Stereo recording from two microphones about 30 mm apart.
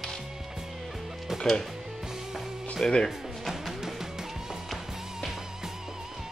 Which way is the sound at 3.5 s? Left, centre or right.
Centre.